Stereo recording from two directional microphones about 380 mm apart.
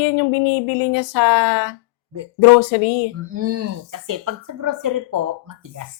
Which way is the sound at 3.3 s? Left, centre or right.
Right.